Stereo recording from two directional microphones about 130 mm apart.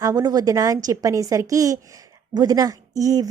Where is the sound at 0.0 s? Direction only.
30° right (ahead or behind).